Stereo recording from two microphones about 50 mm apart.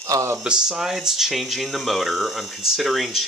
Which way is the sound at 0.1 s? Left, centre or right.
Right.